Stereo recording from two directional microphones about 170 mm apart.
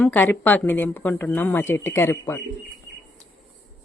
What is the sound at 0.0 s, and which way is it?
Speech, 10° left (ahead or behind).